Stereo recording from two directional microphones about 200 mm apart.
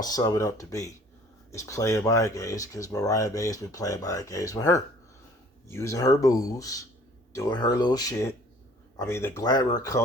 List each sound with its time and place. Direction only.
0.0 s speech: 20° left (ahead or behind)